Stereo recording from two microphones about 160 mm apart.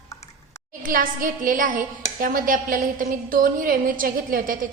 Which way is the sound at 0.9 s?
60° right (ahead or behind).